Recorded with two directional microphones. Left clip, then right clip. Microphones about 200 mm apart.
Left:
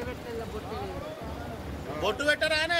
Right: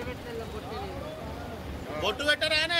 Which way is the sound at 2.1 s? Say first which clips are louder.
Even; 40° left (ahead or behind).